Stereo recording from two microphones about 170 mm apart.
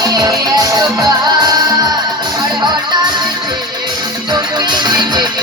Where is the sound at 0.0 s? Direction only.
25° right (ahead or behind).